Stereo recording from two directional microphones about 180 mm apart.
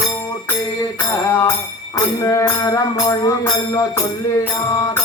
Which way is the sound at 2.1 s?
20° left (ahead or behind).